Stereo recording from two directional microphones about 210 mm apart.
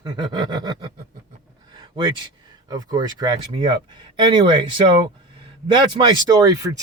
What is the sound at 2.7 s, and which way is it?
Speech, 20° right (ahead or behind).